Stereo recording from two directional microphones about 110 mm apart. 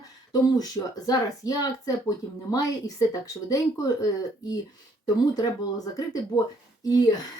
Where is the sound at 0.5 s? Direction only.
35° left (ahead or behind).